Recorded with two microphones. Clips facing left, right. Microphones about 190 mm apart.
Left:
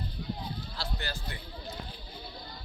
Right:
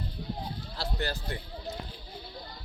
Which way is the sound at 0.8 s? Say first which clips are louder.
Right 7 dB; 45° right (ahead or behind).